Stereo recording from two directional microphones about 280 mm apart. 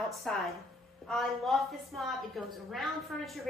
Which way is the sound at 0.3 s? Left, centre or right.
Centre.